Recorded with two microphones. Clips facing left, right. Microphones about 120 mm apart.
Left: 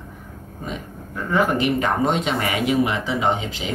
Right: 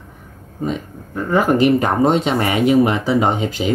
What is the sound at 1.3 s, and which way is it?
Speech, 35° right (ahead or behind).